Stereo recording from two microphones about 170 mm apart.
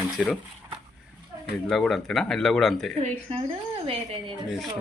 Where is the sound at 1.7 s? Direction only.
Centre (ahead or behind).